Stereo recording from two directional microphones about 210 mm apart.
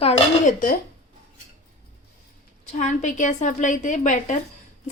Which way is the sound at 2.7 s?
35° left (ahead or behind).